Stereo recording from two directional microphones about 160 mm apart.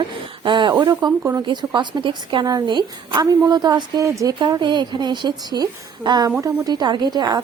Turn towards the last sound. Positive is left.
turn(degrees=-25)  # may be behind; listen again after turning